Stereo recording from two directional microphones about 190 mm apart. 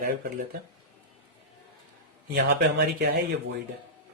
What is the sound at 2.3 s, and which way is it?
Speech, 55° right (ahead or behind).